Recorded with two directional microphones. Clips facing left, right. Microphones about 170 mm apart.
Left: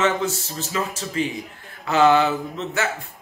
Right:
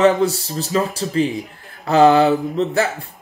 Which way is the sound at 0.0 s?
35° right (ahead or behind).